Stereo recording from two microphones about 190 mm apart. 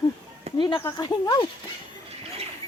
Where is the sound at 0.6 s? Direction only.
20° left (ahead or behind).